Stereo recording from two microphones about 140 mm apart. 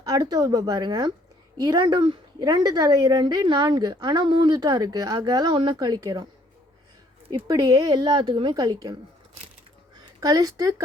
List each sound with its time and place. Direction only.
0.1 s a woman's voice: 30° right (ahead or behind)
7.4 s a woman's voice: 30° right (ahead or behind)
10.2 s a woman's voice: 25° right (ahead or behind)